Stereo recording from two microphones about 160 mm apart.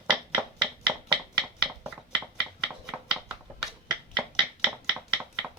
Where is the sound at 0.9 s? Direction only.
5° right (ahead or behind).